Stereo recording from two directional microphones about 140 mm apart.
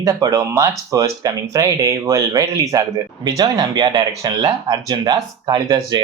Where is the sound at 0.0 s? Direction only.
25° right (ahead or behind).